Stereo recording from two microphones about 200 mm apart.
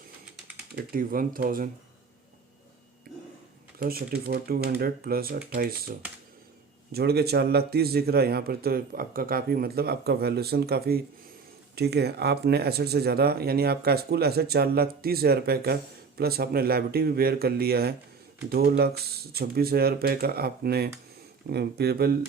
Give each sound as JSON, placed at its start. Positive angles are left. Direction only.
{"t": 0.9, "sound": "speech", "side_deg": -45}
{"t": 3.8, "sound": "speech", "side_deg": -50}
{"t": 6.9, "sound": "speech", "side_deg": -50}